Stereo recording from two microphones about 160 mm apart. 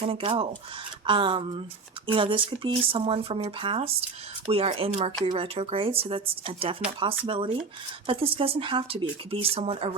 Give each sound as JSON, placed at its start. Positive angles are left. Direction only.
{"t": 0.0, "sound": "speech", "side_deg": -35}